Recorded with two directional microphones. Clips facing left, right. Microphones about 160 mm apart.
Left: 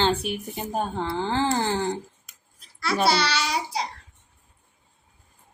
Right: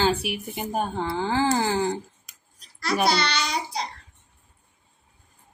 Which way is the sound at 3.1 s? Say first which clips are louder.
Left 1 dB; 5° left (ahead or behind).